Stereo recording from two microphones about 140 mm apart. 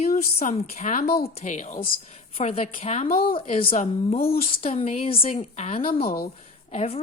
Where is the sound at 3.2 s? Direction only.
40° left (ahead or behind).